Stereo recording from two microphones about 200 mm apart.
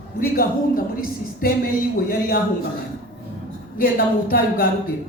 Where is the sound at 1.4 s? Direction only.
45° left (ahead or behind).